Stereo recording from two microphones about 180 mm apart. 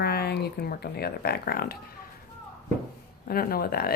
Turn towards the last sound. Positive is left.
turn(degrees=60)  # may be behind; listen again after turning